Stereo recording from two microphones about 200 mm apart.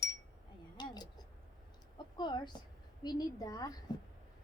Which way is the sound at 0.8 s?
20° left (ahead or behind).